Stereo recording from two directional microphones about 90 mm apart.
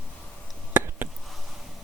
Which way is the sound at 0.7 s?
25° right (ahead or behind).